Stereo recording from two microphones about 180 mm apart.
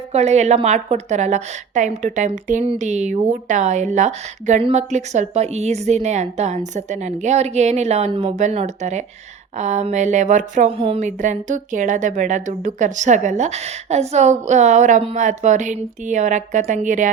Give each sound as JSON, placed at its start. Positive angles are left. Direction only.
{"t": 0.1, "sound": "a woman's voice", "side_deg": -35}
{"t": 10.8, "sound": "speech", "side_deg": -30}